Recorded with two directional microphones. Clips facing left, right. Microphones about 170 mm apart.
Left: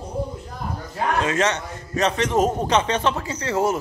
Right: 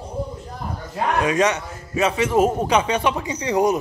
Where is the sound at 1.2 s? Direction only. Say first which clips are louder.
Right 5 dB; 15° right (ahead or behind).